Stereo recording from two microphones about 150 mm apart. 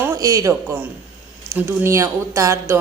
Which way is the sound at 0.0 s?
20° right (ahead or behind).